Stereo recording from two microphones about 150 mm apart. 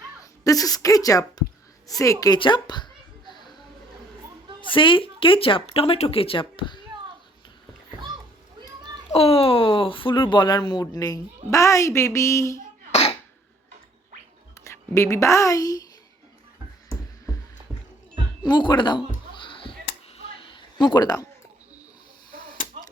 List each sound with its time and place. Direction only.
0.4 s a woman's voice: 25° left (ahead or behind)
2.2 s a sound: 30° left (ahead or behind)
4.7 s speech: 35° left (ahead or behind)
9.1 s a woman's voice: 40° left (ahead or behind); by 12.6 s 20° left (ahead or behind)
12.9 s cough: 45° left (ahead or behind)
14.6 s speech: 20° left (ahead or behind)
18.4 s speech: 30° left (ahead or behind)
19.3 s music: 35° left (ahead or behind)
20.1 s a sound: 35° left (ahead or behind)